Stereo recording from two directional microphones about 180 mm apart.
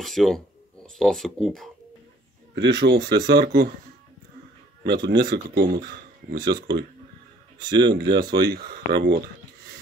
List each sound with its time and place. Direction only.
0.0 s speech: centre (ahead or behind)
2.5 s speech: 65° right (ahead or behind)
4.8 s speech: 65° right (ahead or behind)